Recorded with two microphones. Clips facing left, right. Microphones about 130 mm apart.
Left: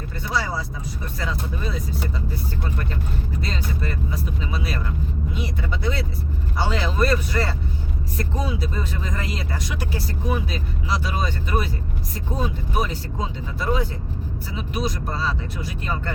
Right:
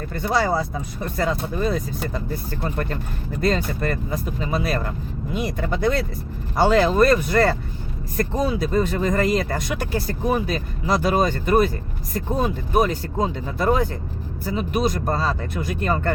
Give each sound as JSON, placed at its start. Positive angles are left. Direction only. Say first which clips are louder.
{"t": 0.2, "sound": "speech", "louder": "right 6 dB", "side_deg": -50}